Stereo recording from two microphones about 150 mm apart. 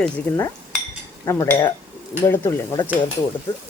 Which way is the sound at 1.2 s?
20° left (ahead or behind).